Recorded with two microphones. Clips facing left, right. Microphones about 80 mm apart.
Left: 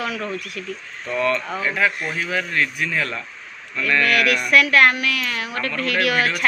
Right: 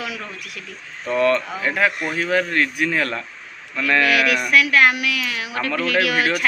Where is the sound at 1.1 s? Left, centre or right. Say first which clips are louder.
Right 3 dB; right.